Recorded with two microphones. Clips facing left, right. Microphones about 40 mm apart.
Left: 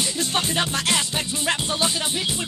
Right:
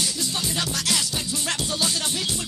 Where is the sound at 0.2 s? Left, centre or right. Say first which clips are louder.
Left 4 dB; left.